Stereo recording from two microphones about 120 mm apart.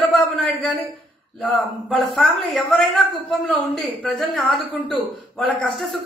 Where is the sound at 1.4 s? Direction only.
10° left (ahead or behind).